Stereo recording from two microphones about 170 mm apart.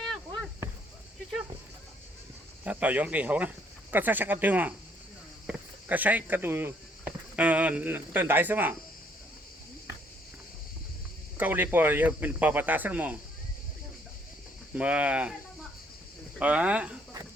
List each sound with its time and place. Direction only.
0.0 s chop: centre (ahead or behind)
2.6 s speech: 10° right (ahead or behind)
11.3 s speech: 10° right (ahead or behind)
14.8 s speech: 10° right (ahead or behind)
16.4 s speech: 10° right (ahead or behind)